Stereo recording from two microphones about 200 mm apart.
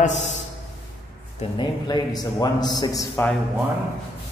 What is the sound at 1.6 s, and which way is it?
A man's voice, 20° left (ahead or behind).